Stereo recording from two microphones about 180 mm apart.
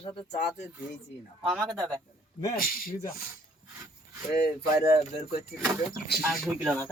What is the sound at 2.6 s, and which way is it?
Speech, 55° left (ahead or behind).